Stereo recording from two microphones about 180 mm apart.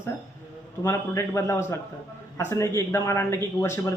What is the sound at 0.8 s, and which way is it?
A man's voice, 15° left (ahead or behind).